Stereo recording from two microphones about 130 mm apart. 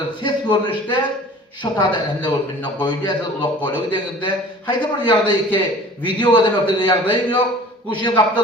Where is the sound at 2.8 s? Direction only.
35° left (ahead or behind).